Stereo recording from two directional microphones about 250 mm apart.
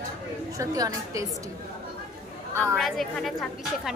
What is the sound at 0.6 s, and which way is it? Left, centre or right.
Speech, centre.